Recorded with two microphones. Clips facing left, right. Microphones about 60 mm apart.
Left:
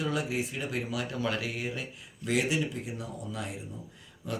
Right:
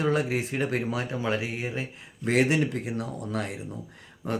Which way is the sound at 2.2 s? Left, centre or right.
Right.